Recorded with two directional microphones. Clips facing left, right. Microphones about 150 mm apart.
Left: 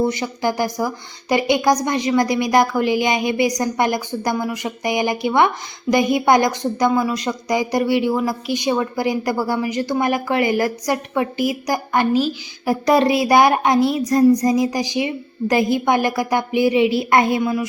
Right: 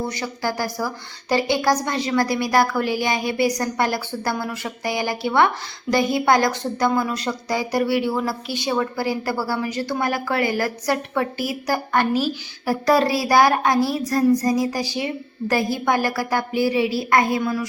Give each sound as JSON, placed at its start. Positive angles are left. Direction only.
{"t": 0.0, "sound": "a woman's voice", "side_deg": 20}